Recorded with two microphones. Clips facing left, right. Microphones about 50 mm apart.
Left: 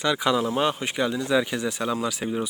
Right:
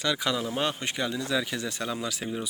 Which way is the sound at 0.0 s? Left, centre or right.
Centre.